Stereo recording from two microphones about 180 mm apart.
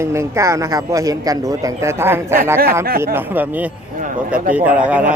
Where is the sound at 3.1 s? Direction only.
10° right (ahead or behind).